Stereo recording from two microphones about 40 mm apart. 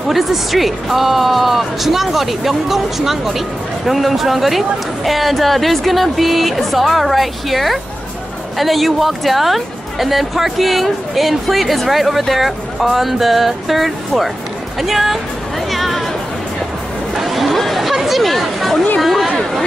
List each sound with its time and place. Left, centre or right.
0.1 s speech: centre
15.7 s chatter: centre
17.1 s chatter: centre
18.9 s speech: centre